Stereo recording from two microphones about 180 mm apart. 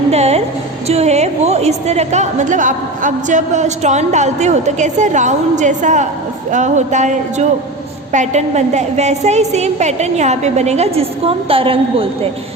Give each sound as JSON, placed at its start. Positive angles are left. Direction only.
{"t": 0.1, "sound": "music", "side_deg": -35}
{"t": 0.9, "sound": "a woman's voice", "side_deg": -35}